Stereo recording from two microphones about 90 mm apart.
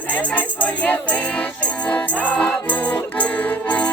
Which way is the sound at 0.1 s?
15° left (ahead or behind).